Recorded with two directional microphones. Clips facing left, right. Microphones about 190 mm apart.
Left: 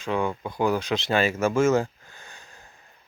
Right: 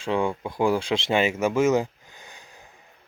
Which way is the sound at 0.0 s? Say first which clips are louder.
Right 2 dB; 25° right (ahead or behind).